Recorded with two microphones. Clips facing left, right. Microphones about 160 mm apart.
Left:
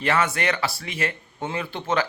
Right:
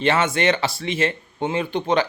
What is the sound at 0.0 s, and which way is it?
Speech, 25° right (ahead or behind).